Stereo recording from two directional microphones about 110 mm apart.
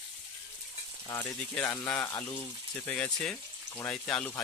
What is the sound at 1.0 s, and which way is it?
Speech, 25° left (ahead or behind).